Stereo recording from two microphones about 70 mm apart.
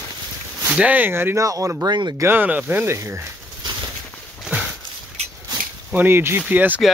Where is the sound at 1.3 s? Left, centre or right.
Right.